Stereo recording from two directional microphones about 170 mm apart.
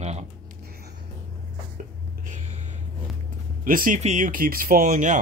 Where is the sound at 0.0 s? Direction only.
40° right (ahead or behind).